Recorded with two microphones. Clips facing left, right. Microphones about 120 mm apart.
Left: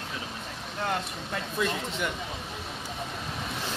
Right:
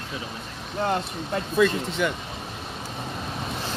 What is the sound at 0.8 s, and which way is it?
Speech, 30° right (ahead or behind).